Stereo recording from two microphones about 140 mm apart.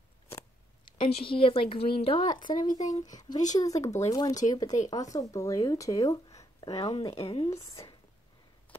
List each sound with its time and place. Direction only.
0.8 s speech: 40° left (ahead or behind)
2.5 s speech: 30° left (ahead or behind)
6.7 s speech: 45° left (ahead or behind)